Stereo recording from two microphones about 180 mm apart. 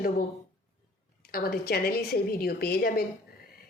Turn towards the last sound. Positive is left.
turn(degrees=60)  # may be behind; listen again after turning